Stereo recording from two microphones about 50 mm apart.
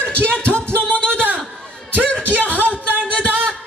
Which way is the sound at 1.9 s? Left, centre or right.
Right.